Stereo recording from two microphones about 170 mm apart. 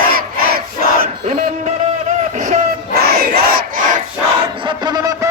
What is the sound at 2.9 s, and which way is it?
Battle cry, 70° right (ahead or behind).